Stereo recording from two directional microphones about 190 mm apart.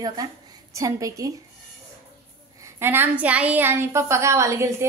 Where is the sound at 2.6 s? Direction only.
10° right (ahead or behind).